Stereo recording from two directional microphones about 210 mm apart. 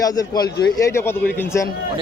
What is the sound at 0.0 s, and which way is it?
A man's voice, 20° left (ahead or behind).